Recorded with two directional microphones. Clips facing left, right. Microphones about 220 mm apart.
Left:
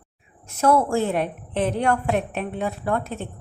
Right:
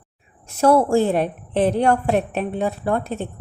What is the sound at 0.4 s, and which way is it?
A woman's voice, 35° right (ahead or behind).